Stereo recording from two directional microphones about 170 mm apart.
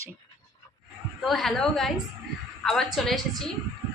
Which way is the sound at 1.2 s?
Centre (ahead or behind).